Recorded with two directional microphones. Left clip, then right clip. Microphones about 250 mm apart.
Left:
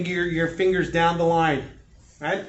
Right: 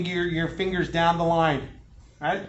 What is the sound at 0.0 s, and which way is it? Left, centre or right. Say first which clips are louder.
Speech: left 3 dB; centre.